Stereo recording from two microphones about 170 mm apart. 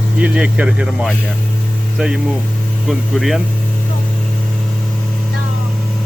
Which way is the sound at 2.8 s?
Centre (ahead or behind).